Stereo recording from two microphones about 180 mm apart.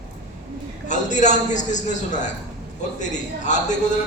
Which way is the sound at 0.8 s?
40° left (ahead or behind).